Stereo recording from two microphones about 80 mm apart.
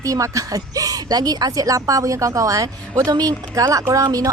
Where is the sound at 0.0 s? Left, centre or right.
Right.